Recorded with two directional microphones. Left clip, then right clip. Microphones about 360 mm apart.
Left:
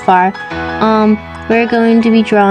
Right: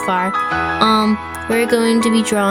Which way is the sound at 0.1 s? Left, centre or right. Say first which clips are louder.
Left 10 dB; right.